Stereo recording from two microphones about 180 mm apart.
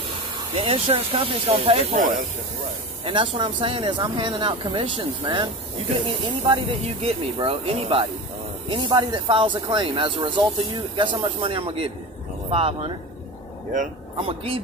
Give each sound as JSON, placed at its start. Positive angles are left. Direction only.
{"t": 0.7, "sound": "speech", "side_deg": -30}
{"t": 3.1, "sound": "speech", "side_deg": -30}
{"t": 6.5, "sound": "speech", "side_deg": -30}